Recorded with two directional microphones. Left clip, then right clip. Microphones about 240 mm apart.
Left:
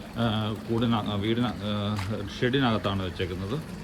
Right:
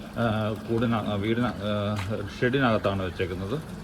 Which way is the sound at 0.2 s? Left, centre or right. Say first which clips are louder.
Right 2 dB; centre.